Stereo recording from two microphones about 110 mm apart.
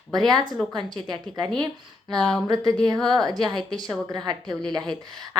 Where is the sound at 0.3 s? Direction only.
40° right (ahead or behind).